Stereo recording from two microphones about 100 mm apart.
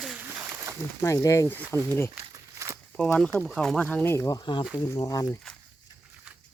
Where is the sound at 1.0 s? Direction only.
30° left (ahead or behind).